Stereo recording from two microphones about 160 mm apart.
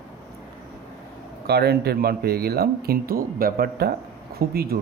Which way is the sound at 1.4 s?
85° right.